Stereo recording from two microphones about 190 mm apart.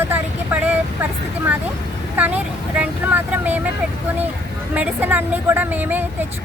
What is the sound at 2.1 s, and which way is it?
Speech, 10° right (ahead or behind).